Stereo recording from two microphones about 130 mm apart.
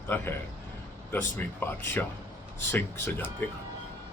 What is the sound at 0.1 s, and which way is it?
Speech, 15° left (ahead or behind).